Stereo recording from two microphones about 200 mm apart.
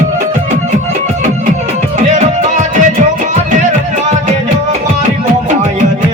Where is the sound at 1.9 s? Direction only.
35° right (ahead or behind).